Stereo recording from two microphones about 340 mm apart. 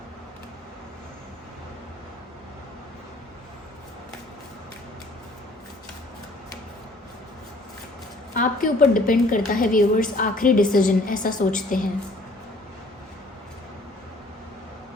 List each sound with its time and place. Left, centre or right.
8.4 s a woman's voice: left